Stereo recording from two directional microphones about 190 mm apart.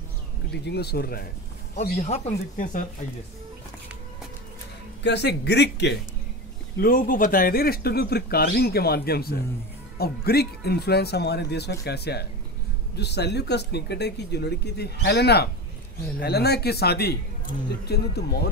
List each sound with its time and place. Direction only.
0.5 s speech: 60° left (ahead or behind)
1.8 s speech: 35° left (ahead or behind)
5.0 s speech: 60° left (ahead or behind)
6.8 s speech: 50° left (ahead or behind)